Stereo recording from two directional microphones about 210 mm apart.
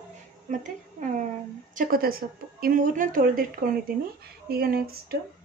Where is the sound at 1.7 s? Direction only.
45° right (ahead or behind).